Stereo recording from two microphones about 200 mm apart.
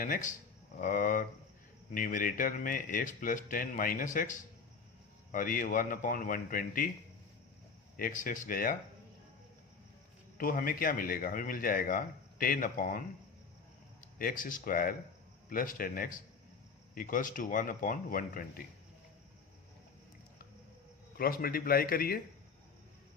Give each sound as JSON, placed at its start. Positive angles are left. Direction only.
{"t": 0.0, "sound": "speech", "side_deg": 40}
{"t": 7.9, "sound": "speech", "side_deg": 45}
{"t": 10.3, "sound": "speech", "side_deg": 45}
{"t": 14.2, "sound": "speech", "side_deg": 45}
{"t": 21.2, "sound": "speech", "side_deg": 45}